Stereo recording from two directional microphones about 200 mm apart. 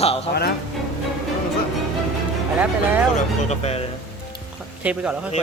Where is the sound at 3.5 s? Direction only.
30° left (ahead or behind).